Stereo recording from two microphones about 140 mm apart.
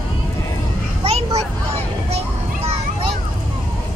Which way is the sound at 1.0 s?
45° right (ahead or behind).